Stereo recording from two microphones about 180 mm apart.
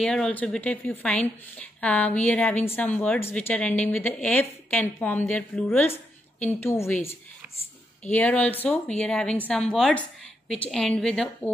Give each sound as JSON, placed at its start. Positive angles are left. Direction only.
{"t": 0.0, "sound": "a woman's voice", "side_deg": 5}